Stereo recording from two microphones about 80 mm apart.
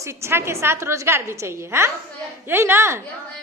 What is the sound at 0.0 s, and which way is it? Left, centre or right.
A woman's voice, right.